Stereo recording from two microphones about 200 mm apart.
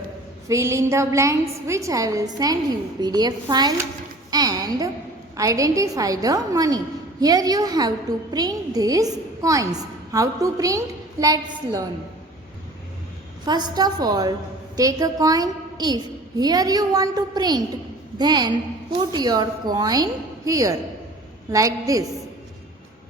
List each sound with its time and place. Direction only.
0.4 s a woman's voice: 15° right (ahead or behind)
4.3 s a sound: 20° right (ahead or behind)
5.4 s a woman's voice: 15° right (ahead or behind)
13.4 s a woman's voice: 20° right (ahead or behind)